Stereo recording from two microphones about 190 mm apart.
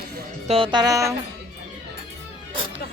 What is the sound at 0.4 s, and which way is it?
Speech, 30° right (ahead or behind).